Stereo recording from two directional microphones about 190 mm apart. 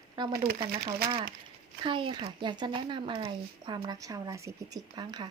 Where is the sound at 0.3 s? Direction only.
50° right (ahead or behind).